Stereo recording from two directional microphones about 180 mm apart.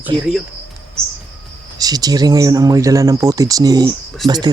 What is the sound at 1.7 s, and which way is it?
Speech, 20° right (ahead or behind).